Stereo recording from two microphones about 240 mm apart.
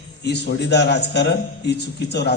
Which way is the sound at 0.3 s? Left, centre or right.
Left.